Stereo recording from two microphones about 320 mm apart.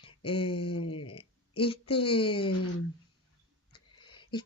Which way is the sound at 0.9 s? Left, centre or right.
Left.